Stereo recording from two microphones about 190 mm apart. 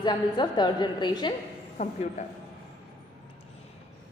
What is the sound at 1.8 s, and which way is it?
Speech, 35° left (ahead or behind).